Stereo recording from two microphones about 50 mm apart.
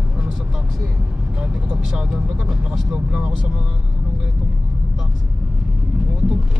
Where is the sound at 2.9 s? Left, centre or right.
Right.